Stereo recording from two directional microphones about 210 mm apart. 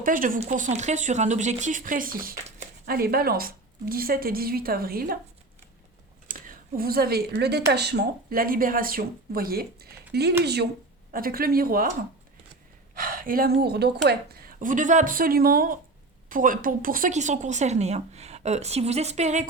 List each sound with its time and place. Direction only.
0.0 s a woman's voice: 40° right (ahead or behind)
6.2 s a woman's voice: 40° right (ahead or behind)